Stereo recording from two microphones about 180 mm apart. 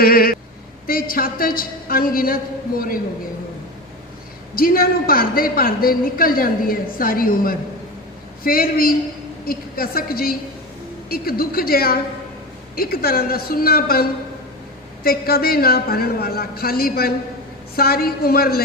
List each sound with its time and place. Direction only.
0.0 s a woman's voice: 55° left (ahead or behind)
4.5 s a woman's voice: 55° left (ahead or behind)